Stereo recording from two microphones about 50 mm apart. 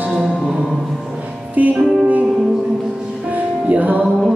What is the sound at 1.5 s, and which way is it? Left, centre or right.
Music, right.